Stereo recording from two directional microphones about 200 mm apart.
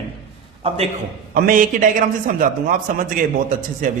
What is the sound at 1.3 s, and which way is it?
A man's voice, 45° right (ahead or behind).